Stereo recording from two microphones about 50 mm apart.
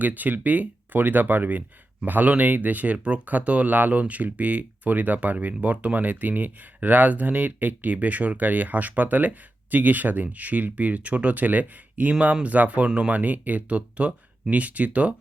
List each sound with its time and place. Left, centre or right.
0.0 s speech: right